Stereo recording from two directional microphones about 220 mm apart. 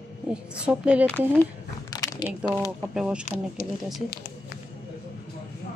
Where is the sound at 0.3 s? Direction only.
5° right (ahead or behind).